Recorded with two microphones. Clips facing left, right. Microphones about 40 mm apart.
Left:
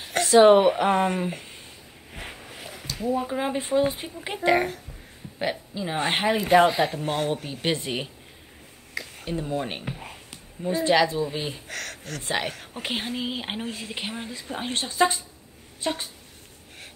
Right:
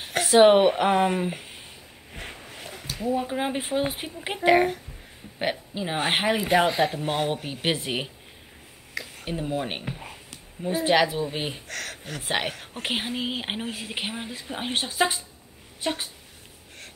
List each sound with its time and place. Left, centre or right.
0.0 s a sound: centre
0.4 s a woman's voice: right
0.7 s a woman's voice: centre
2.1 s a sound: centre
2.9 s a woman's voice: centre; by 6.2 s right
6.2 s speech: centre
8.9 s a sound: centre
9.2 s speech: centre
9.8 s a sound: centre
11.3 s a woman's voice: centre
11.6 s speech: centre
12.0 s a woman's voice: centre